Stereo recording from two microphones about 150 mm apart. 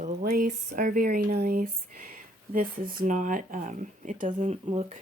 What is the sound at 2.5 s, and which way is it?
Speech, 70° right (ahead or behind).